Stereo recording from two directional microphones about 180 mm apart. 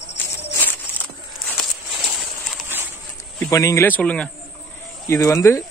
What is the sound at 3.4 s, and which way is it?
A man's voice, 15° left (ahead or behind).